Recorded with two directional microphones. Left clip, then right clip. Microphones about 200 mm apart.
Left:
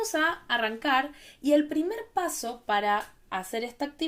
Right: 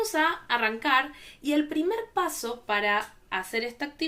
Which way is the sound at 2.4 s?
45° left (ahead or behind).